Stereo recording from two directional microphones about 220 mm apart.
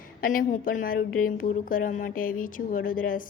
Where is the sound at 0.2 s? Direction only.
40° left (ahead or behind).